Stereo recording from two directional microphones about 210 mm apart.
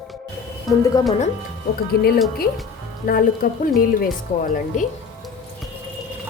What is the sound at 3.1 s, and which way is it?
Speech, 45° left (ahead or behind).